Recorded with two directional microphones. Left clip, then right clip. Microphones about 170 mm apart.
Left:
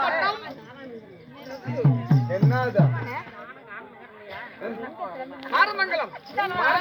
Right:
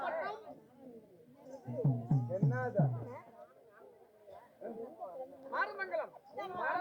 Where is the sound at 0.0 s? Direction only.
25° right (ahead or behind).